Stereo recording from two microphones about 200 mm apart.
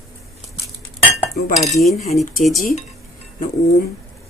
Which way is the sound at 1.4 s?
50° left (ahead or behind).